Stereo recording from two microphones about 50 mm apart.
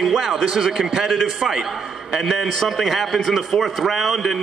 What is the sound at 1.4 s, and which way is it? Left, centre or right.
Speech, centre.